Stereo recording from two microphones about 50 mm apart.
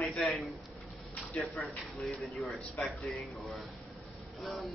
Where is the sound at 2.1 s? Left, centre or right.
Left.